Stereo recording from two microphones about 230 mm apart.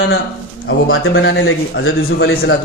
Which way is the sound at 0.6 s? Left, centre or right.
Left.